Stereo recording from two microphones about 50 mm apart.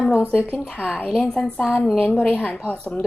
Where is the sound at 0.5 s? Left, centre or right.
Left.